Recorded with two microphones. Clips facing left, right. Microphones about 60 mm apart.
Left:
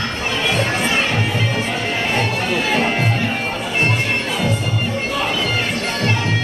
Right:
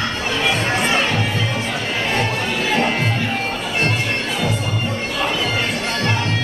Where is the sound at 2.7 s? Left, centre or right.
Centre.